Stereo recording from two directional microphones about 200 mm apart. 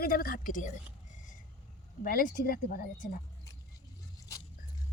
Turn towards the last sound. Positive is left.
turn(degrees=45)  # may be behind; listen again after turning